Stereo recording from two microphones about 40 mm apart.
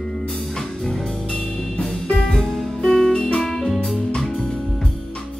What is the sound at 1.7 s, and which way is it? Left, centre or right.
Music, centre.